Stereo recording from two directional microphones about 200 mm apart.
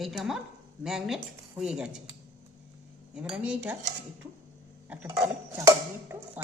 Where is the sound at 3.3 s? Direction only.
5° right (ahead or behind).